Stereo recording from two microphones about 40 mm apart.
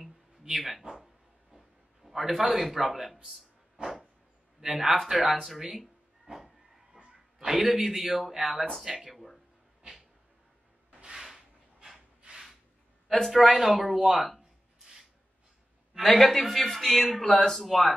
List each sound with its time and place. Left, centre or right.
0.6 s a man's voice: centre
2.0 s a man's voice: centre
3.8 s a sound: right
4.6 s speech: centre
5.4 s a man's voice: centre
6.3 s a sound: centre
7.3 s a man's voice: centre
13.4 s a man's voice: centre
14.8 s music: centre
16.0 s a man's voice: centre